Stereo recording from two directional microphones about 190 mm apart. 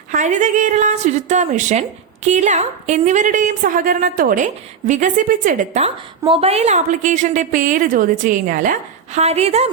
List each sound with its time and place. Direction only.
0.1 s a woman's voice: 40° right (ahead or behind)
9.1 s a woman's voice: 35° right (ahead or behind)